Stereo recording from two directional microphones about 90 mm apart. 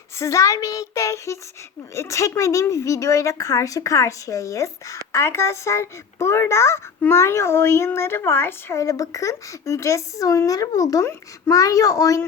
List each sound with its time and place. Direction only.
0.2 s a child's voice: 35° left (ahead or behind)